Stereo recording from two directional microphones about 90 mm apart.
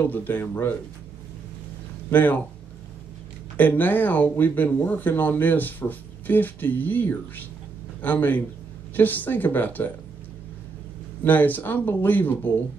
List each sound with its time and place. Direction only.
0.0 s speech: 20° left (ahead or behind)
2.0 s speech: 20° left (ahead or behind)
3.5 s speech: 20° left (ahead or behind)
11.2 s speech: 20° left (ahead or behind)